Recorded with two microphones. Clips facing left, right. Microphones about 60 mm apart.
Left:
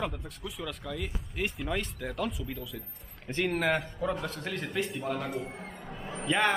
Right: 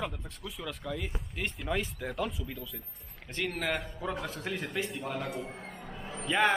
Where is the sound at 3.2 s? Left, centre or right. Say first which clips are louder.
Left 5 dB; centre.